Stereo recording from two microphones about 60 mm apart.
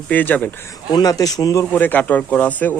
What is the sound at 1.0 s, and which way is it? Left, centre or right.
Speech, left.